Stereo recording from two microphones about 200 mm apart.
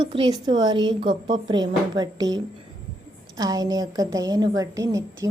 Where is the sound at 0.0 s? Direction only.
25° right (ahead or behind).